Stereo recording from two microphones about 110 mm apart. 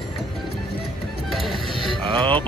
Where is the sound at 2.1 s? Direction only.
45° right (ahead or behind).